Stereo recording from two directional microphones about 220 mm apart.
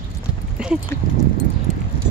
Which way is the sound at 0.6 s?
5° right (ahead or behind).